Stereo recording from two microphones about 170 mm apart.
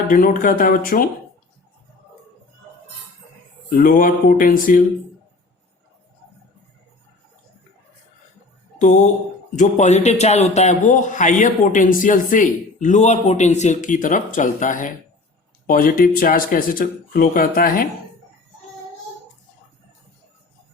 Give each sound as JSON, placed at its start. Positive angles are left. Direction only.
{"t": 0.1, "sound": "speech", "side_deg": 55}
{"t": 3.8, "sound": "speech", "side_deg": 55}
{"t": 8.8, "sound": "speech", "side_deg": 45}